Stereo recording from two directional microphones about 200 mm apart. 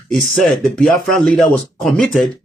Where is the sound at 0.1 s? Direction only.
Centre (ahead or behind).